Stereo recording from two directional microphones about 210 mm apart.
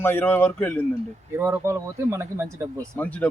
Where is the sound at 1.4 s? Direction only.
10° right (ahead or behind).